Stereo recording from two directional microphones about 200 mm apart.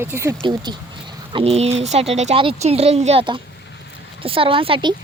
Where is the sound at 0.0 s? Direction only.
10° right (ahead or behind).